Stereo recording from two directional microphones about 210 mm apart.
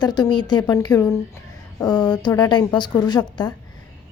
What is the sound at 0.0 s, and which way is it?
A woman's voice, 20° left (ahead or behind).